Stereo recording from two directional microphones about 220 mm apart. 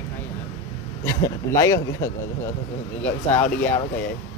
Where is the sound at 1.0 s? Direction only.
15° left (ahead or behind).